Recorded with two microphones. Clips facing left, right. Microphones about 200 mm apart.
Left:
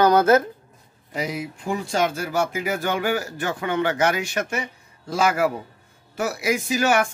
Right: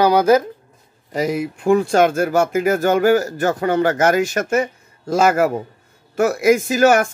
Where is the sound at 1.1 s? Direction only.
50° right (ahead or behind).